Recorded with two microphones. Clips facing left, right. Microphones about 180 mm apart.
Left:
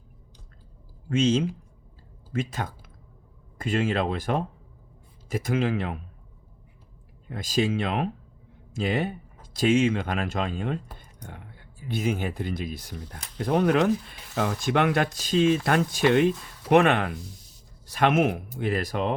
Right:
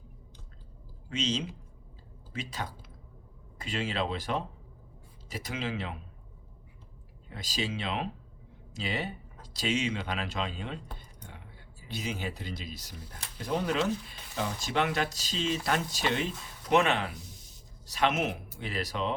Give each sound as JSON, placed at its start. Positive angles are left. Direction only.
{"t": 1.1, "sound": "speech", "side_deg": 50}
{"t": 7.3, "sound": "speech", "side_deg": 50}